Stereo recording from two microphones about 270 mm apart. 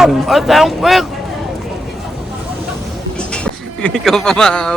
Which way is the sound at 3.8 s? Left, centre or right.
Centre.